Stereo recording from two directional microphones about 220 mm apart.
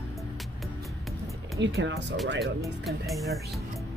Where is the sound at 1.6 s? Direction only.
60° right (ahead or behind).